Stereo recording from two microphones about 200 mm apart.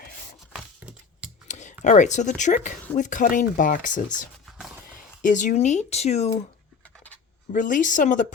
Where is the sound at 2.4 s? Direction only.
40° left (ahead or behind).